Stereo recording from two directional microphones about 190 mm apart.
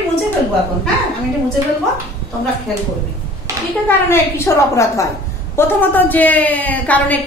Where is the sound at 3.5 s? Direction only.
15° right (ahead or behind).